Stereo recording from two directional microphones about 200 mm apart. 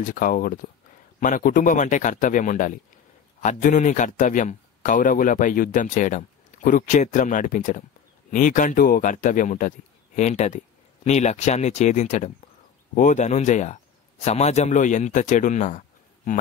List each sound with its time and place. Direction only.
0.0 s a man's voice: 45° left (ahead or behind)